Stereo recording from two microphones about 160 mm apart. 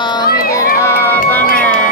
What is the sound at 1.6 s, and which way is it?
Music, 10° left (ahead or behind).